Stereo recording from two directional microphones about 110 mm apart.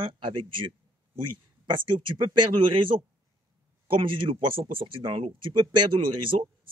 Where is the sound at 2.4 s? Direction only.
50° right (ahead or behind).